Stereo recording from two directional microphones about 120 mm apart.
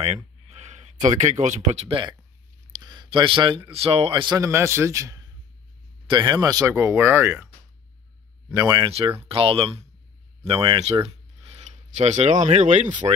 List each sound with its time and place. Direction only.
0.0 s speech: 65° right (ahead or behind)
1.9 s speech: 45° right (ahead or behind)
2.7 s a sound: 35° right (ahead or behind)
3.7 s speech: 55° right (ahead or behind)
4.4 s speech: 25° right (ahead or behind)
6.0 s speech: 40° right (ahead or behind); by 7.3 s 20° right (ahead or behind)
8.5 s speech: 35° right (ahead or behind)
9.3 s speech: 50° right (ahead or behind)
10.9 s speech: 60° right (ahead or behind); by 12.9 s 85° right